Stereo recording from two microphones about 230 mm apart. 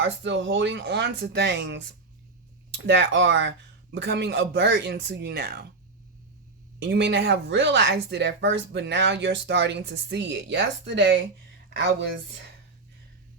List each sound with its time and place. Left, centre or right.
0.0 s speech: right
6.7 s speech: right